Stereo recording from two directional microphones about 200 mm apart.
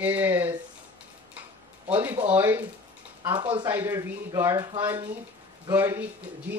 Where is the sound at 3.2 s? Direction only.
25° right (ahead or behind).